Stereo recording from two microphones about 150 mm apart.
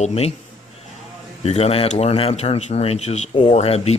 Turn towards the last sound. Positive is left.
turn(degrees=45)  # may be behind; listen again after turning